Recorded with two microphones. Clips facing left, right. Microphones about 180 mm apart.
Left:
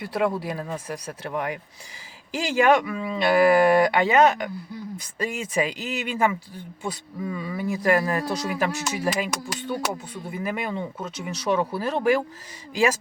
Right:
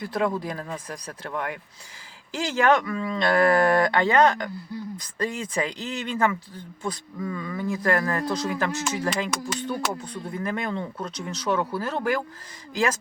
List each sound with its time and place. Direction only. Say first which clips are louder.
0.0 s speech: left 1 dB; 10° left (ahead or behind)